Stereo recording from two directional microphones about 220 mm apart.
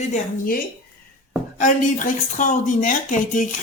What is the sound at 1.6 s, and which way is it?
Speech, 35° left (ahead or behind).